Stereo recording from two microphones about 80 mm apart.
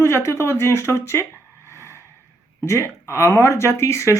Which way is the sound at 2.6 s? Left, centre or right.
Left.